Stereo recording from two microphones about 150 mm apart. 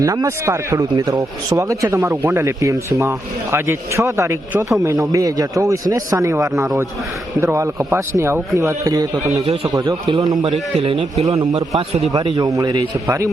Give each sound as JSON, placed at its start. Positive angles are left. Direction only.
{"t": 0.0, "sound": "speech", "side_deg": -20}
{"t": 10.4, "sound": "a man's voice", "side_deg": -40}
{"t": 11.3, "sound": "speech", "side_deg": -25}